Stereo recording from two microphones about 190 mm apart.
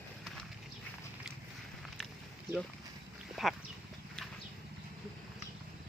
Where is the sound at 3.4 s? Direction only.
Centre (ahead or behind).